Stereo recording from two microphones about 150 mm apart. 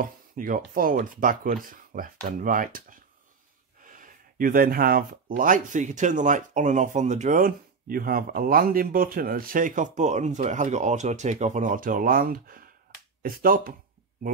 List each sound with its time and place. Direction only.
0.0 s speech: 70° right (ahead or behind)